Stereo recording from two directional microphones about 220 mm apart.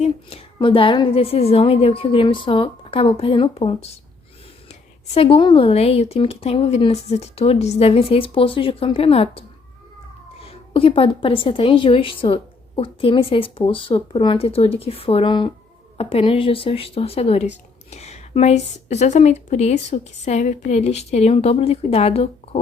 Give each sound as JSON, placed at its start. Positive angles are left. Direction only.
{"t": 0.0, "sound": "a woman's voice", "side_deg": 25}
{"t": 10.4, "sound": "a woman's voice", "side_deg": 25}